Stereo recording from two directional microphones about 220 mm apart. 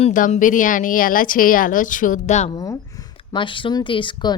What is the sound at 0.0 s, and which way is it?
Speech, 35° left (ahead or behind).